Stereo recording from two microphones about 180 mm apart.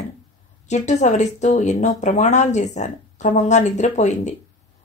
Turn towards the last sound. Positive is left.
turn(degrees=40)  # may be behind; listen again after turning